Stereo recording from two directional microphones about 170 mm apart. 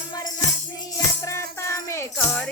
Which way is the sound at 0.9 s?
20° left (ahead or behind).